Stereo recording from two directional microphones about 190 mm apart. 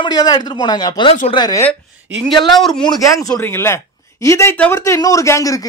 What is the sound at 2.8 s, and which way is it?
Speech, 20° left (ahead or behind).